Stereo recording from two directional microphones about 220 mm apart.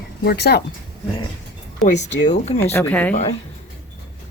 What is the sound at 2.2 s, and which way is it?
Speech, 30° left (ahead or behind).